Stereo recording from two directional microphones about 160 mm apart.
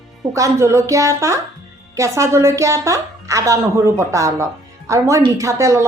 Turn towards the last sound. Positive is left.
turn(degrees=-20)  # may be behind; listen again after turning